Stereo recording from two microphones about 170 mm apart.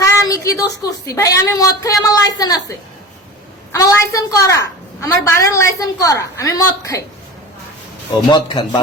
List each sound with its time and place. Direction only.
0.0 s child singing: 20° left (ahead or behind)
0.9 s a woman's voice: 20° left (ahead or behind)
8.3 s a woman's voice: 25° left (ahead or behind)